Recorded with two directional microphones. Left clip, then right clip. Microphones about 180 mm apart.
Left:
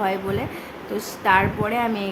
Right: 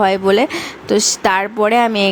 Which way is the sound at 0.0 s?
55° right (ahead or behind).